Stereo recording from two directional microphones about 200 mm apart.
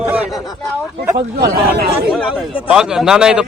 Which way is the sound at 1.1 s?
50° right (ahead or behind).